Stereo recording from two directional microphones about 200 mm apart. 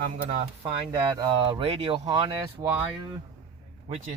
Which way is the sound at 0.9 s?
25° right (ahead or behind).